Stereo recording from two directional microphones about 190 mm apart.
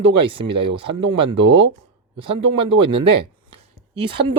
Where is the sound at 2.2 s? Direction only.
30° right (ahead or behind).